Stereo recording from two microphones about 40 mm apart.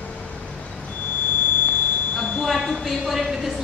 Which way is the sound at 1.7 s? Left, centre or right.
Left.